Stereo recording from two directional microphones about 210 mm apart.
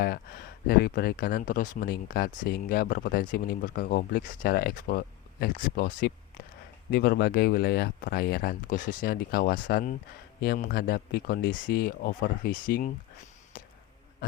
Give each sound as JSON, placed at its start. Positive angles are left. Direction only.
{"t": 0.0, "sound": "speech", "side_deg": 45}